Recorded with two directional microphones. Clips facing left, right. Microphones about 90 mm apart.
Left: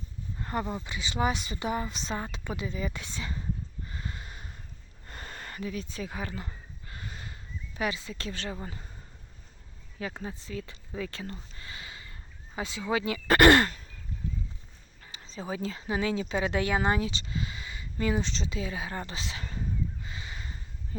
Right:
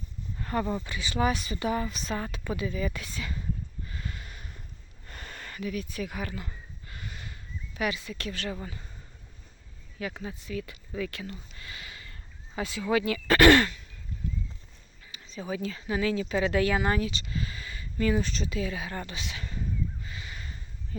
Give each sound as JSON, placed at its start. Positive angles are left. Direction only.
{"t": 0.3, "sound": "a sound", "side_deg": 20}
{"t": 0.9, "sound": "speech", "side_deg": 20}
{"t": 3.8, "sound": "a sound", "side_deg": 25}
{"t": 5.0, "sound": "speech", "side_deg": 30}
{"t": 6.8, "sound": "a sound", "side_deg": 30}
{"t": 8.6, "sound": "speech", "side_deg": 30}
{"t": 10.0, "sound": "speech", "side_deg": 30}
{"t": 13.3, "sound": "sigh", "side_deg": 35}
{"t": 15.1, "sound": "speech", "side_deg": 30}